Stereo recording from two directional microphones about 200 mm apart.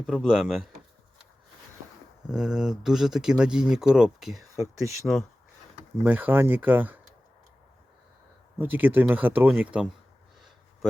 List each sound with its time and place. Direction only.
0.0 s speech: 5° right (ahead or behind)
2.3 s speech: 5° right (ahead or behind)
4.5 s speech: 15° right (ahead or behind)
8.5 s speech: 10° right (ahead or behind)